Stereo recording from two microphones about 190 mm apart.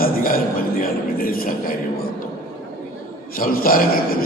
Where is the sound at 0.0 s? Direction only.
50° left (ahead or behind).